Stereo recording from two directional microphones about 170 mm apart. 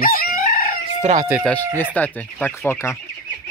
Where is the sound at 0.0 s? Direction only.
55° left (ahead or behind).